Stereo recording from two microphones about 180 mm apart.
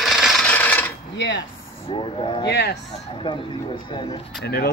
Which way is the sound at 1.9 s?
30° left (ahead or behind).